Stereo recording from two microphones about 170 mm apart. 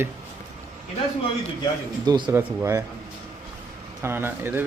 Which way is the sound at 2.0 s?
25° right (ahead or behind).